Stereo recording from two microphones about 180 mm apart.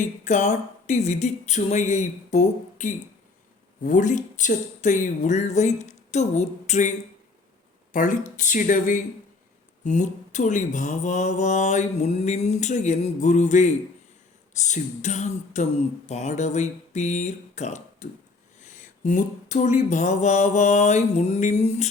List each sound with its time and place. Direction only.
0.0 s mantra: 40° left (ahead or behind)
7.9 s speech: 45° left (ahead or behind)
9.8 s mantra: 45° left (ahead or behind)
16.0 s speech: 40° left (ahead or behind)
18.6 s mantra: 45° left (ahead or behind)